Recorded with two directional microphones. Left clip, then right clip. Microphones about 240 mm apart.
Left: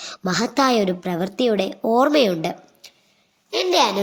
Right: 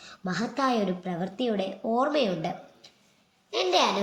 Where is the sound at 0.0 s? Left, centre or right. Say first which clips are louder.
Left 9 dB; left.